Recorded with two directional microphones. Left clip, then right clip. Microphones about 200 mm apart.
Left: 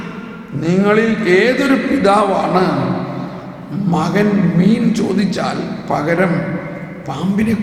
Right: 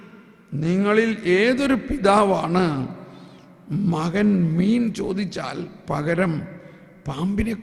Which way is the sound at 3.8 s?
40° right (ahead or behind).